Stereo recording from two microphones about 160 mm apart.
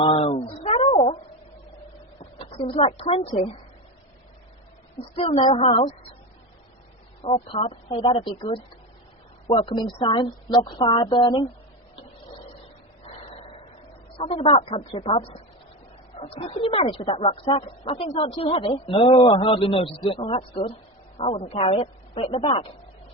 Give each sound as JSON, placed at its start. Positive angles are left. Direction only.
{"t": 0.0, "sound": "a sound", "side_deg": 35}
{"t": 2.4, "sound": "a man's voice", "side_deg": 35}
{"t": 5.1, "sound": "a man's voice", "side_deg": 40}
{"t": 5.4, "sound": "speech", "side_deg": 30}
{"t": 7.5, "sound": "a man's voice", "side_deg": 35}
{"t": 13.1, "sound": "a sound", "side_deg": 35}
{"t": 14.2, "sound": "a man's voice", "side_deg": 35}